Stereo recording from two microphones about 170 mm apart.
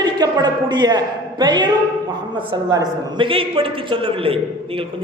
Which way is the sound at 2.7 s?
25° right (ahead or behind).